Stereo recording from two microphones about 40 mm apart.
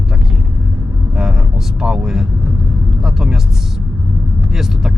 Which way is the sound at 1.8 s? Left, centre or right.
Centre.